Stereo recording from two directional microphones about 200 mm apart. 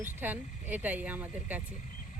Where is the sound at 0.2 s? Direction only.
10° right (ahead or behind).